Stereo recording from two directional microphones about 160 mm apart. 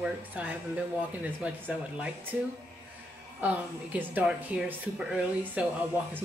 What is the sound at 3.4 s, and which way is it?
Speech, 10° right (ahead or behind).